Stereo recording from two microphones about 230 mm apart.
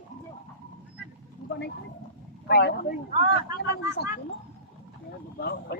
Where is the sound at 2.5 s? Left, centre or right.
Left.